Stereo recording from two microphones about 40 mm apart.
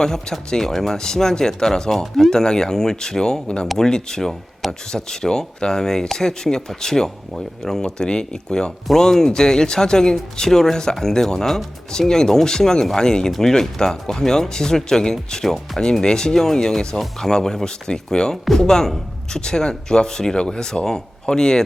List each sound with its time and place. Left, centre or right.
0.0 s speech: centre
3.8 s speech: centre